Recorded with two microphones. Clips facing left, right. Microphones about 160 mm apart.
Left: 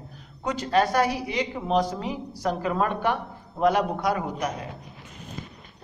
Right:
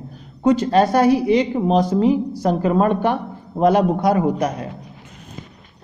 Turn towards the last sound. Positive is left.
turn(degrees=-30)  # may be behind; listen again after turning